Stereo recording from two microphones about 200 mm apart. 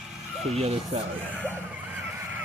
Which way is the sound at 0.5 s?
30° right (ahead or behind).